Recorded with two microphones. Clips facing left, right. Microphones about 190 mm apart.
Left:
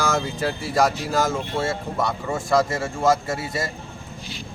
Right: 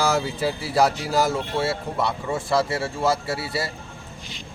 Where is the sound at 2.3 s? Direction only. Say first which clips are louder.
Left 3 dB; 10° right (ahead or behind).